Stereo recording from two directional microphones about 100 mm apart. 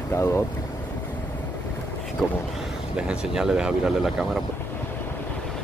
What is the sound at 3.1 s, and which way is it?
Speech, 10° right (ahead or behind).